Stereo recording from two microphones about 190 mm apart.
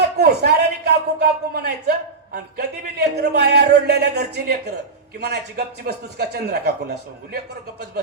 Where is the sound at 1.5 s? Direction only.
55° right (ahead or behind).